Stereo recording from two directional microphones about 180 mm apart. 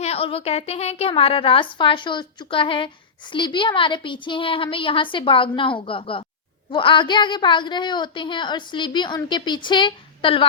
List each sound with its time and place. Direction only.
0.0 s a woman's voice: 35° left (ahead or behind)